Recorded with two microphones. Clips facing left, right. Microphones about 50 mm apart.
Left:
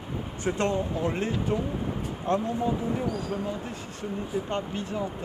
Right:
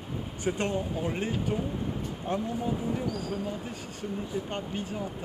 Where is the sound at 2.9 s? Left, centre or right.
Centre.